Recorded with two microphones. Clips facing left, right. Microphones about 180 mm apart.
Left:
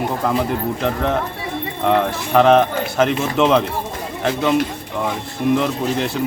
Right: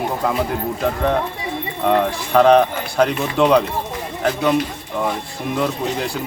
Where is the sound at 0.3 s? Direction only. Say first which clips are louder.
Left 2 dB; 5° right (ahead or behind).